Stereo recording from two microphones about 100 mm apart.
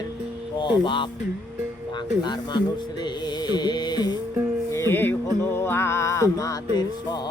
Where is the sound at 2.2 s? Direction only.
45° left (ahead or behind).